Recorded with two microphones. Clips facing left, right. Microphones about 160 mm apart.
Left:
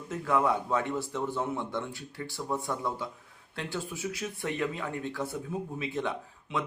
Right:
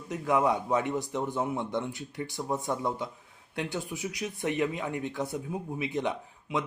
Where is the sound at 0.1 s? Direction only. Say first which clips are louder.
Right 1 dB; 15° right (ahead or behind).